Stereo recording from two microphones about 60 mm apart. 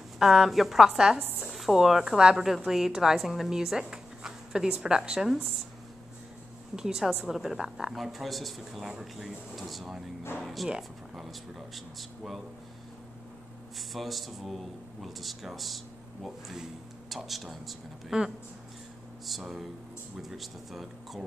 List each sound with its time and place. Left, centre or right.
0.2 s a man's voice: centre
6.7 s a man's voice: centre
13.7 s a man's voice: centre